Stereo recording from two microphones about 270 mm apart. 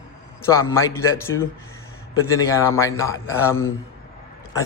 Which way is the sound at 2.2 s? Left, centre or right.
Centre.